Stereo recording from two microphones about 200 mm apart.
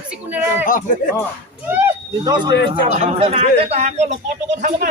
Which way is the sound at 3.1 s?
30° right (ahead or behind).